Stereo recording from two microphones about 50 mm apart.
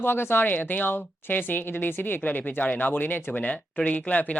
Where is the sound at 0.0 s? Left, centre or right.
Left.